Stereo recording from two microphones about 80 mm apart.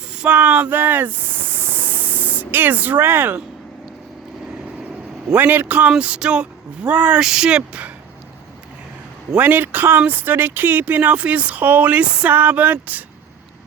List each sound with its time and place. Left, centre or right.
0.1 s a sound: centre; by 3.4 s right
5.3 s speech: right
9.3 s speech: right